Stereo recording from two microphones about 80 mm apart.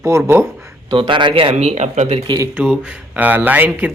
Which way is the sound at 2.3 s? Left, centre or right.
Right.